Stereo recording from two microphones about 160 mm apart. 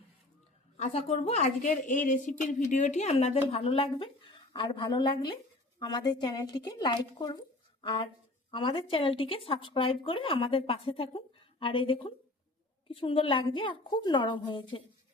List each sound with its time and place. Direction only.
0.8 s a woman's voice: 40° left (ahead or behind)